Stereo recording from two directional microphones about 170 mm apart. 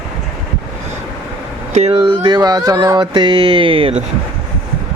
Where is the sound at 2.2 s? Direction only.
25° right (ahead or behind).